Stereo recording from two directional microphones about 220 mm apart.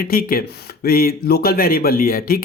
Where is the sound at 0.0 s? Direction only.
40° left (ahead or behind).